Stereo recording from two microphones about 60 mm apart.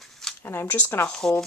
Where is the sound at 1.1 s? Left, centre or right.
Centre.